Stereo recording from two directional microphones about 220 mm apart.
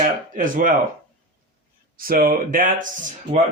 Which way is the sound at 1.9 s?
40° right (ahead or behind).